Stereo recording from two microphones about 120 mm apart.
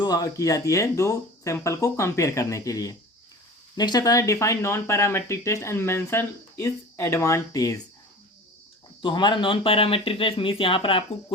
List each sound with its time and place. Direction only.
0.0 s speech: 30° left (ahead or behind)
9.0 s speech: 40° left (ahead or behind)